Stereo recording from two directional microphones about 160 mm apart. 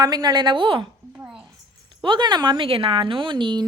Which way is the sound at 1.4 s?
30° right (ahead or behind).